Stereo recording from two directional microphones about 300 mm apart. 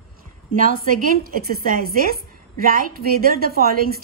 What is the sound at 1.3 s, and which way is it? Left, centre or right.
A woman's voice, right.